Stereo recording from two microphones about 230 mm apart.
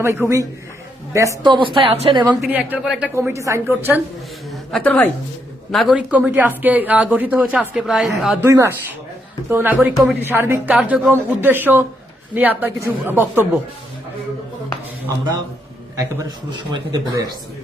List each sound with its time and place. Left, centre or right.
0.0 s a woman's voice: centre
2.2 s speech: centre
4.7 s a woman's voice: centre
16.5 s speech: centre